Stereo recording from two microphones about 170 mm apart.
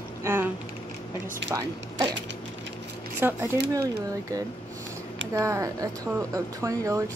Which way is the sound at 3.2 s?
15° right (ahead or behind).